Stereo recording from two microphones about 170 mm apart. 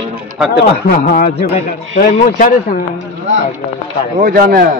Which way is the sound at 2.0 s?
50° left (ahead or behind).